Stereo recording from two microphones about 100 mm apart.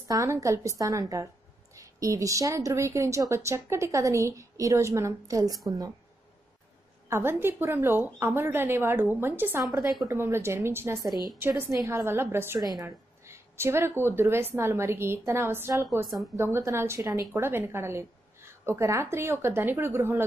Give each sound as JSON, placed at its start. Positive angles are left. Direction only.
{"t": 0.1, "sound": "a woman's voice", "side_deg": -30}
{"t": 7.1, "sound": "speech", "side_deg": -25}
{"t": 12.5, "sound": "a woman's voice", "side_deg": -40}
{"t": 12.8, "sound": "speech", "side_deg": -25}
{"t": 17.0, "sound": "a woman's voice", "side_deg": -35}
{"t": 17.3, "sound": "a woman's voice", "side_deg": -25}